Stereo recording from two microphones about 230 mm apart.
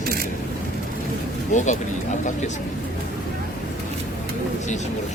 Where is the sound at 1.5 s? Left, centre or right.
Left.